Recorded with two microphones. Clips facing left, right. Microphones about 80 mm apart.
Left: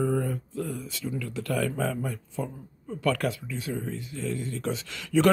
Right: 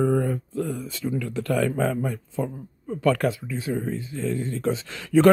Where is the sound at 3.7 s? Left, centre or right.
Right.